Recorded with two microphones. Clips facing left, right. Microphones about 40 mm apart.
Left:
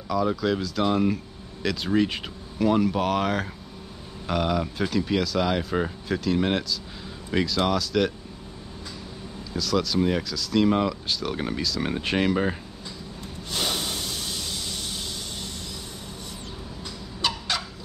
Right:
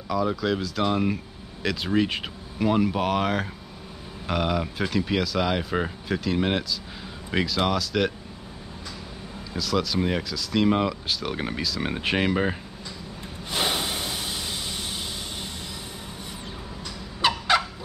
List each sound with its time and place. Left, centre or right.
0.1 s speech: centre
9.5 s speech: centre
13.5 s a sound: centre
17.2 s fowl: right